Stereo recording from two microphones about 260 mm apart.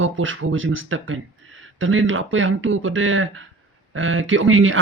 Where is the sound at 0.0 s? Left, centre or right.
Right.